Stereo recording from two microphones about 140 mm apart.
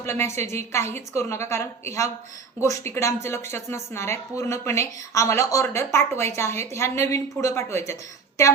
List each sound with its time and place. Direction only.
0.0 s speech: 20° left (ahead or behind)